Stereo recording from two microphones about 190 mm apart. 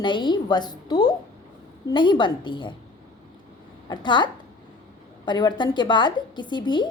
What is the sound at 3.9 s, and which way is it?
A woman's voice, 25° left (ahead or behind).